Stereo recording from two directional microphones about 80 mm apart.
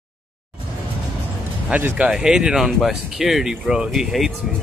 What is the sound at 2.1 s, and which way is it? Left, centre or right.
Speech, centre.